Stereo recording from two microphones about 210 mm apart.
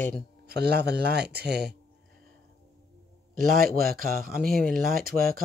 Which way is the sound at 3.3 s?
40° right (ahead or behind).